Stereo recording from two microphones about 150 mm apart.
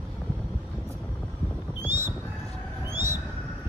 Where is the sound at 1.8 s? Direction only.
15° right (ahead or behind).